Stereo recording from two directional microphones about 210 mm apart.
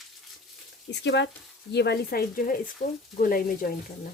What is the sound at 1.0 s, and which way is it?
Speech, 55° left (ahead or behind).